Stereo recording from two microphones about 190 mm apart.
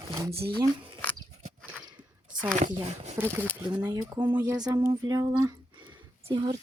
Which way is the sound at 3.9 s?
20° right (ahead or behind).